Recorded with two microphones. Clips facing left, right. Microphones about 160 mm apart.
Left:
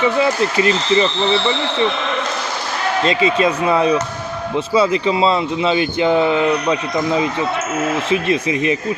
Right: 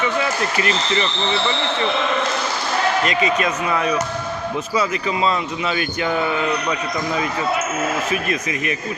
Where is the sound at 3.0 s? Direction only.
30° left (ahead or behind).